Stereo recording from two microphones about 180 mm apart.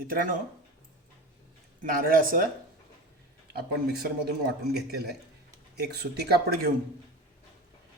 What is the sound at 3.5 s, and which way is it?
A man's voice, 65° right (ahead or behind).